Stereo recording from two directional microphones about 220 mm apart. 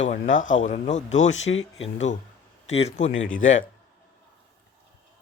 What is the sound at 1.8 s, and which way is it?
Speech, 30° left (ahead or behind).